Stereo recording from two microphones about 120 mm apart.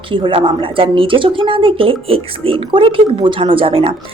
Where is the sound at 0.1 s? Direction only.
45° right (ahead or behind).